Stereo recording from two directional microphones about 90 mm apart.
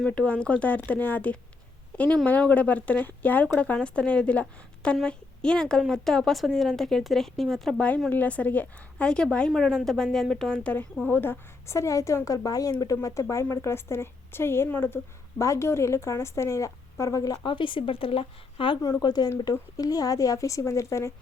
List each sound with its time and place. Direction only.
0.1 s a woman's voice: 15° left (ahead or behind)
8.1 s a woman's voice: 15° left (ahead or behind)
15.4 s a woman's voice: 35° left (ahead or behind)
17.4 s speech: 65° left (ahead or behind); by 18.8 s 80° left
18.8 s a woman's voice: 40° left (ahead or behind)